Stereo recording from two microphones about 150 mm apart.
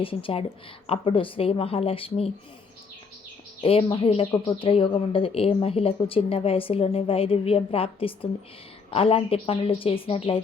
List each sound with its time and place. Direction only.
0.0 s a woman's voice: 40° left (ahead or behind)
3.6 s a woman's voice: 40° left (ahead or behind)